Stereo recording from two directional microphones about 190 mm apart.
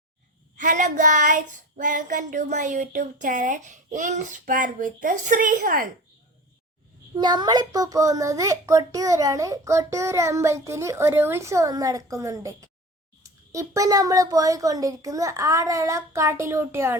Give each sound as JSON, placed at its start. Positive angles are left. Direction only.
{"t": 0.5, "sound": "child singing", "side_deg": -40}
{"t": 7.2, "sound": "a child's voice", "side_deg": -20}